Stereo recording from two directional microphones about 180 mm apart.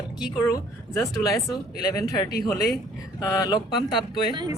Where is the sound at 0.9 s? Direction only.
15° left (ahead or behind).